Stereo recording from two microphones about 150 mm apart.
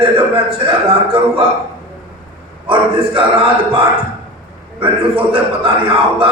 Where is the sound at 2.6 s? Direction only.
35° right (ahead or behind).